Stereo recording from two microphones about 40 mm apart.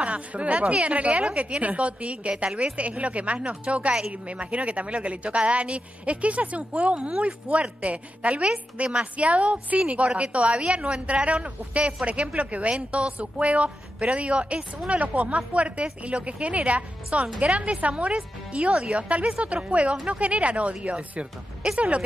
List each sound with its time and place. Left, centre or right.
0.0 s speech: right